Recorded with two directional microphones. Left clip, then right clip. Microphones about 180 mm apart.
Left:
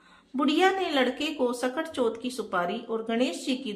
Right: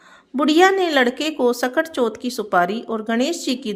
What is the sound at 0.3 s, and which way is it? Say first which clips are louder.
A woman's voice: right 9 dB; 40° right (ahead or behind).